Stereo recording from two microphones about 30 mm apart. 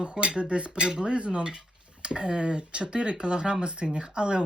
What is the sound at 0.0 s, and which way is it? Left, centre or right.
Speech, right.